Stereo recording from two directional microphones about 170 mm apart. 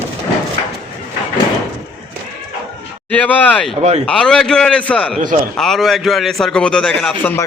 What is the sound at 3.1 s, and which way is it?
A man's voice, 10° left (ahead or behind).